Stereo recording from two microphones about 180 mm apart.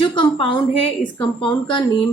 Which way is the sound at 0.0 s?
30° left (ahead or behind).